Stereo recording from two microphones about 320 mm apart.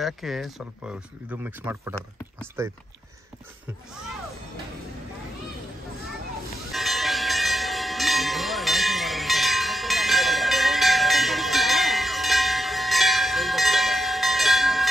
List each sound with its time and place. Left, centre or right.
0.0 s speech: centre
6.7 s bell: centre